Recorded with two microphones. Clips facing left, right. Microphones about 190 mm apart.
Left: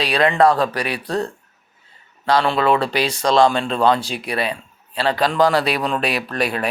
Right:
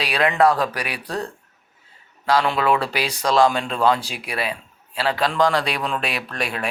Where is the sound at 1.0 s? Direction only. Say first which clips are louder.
Left 5 dB; 35° left (ahead or behind).